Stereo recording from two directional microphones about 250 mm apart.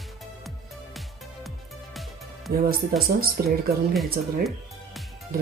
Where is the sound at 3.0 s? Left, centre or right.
Right.